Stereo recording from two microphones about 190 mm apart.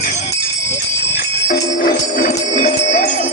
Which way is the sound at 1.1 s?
45° left (ahead or behind).